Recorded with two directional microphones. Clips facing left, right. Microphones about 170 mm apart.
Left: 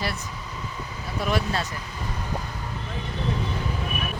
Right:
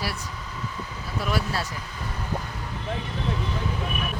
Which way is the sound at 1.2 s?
5° right (ahead or behind).